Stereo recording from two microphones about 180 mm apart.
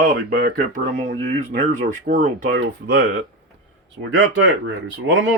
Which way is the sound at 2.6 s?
60° right (ahead or behind).